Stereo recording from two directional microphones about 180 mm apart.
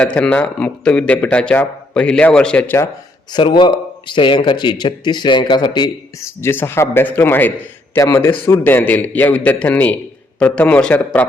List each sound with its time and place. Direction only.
0.0 s speech: 5° left (ahead or behind)
3.3 s a man's voice: 25° left (ahead or behind); by 11.3 s 10° left (ahead or behind)